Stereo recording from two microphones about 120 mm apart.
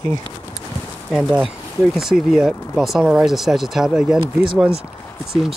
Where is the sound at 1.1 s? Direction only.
5° right (ahead or behind).